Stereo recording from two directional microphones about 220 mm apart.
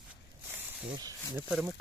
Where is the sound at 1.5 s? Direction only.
5° right (ahead or behind).